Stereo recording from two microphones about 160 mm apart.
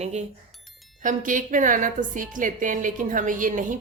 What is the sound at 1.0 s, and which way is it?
A woman's voice, 55° right (ahead or behind).